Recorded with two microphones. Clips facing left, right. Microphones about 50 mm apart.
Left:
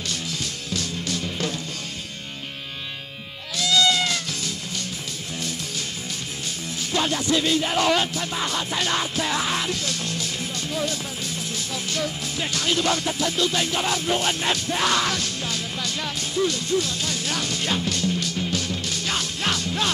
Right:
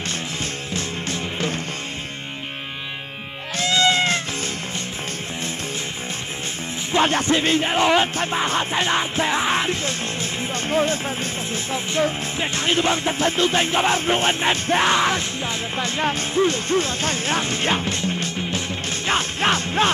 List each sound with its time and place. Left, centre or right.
3.5 s music: right
6.9 s music: right
8.1 s music: right